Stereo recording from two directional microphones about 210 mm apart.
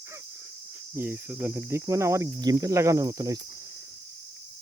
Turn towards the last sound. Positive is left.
turn(degrees=-15)  # may be behind; listen again after turning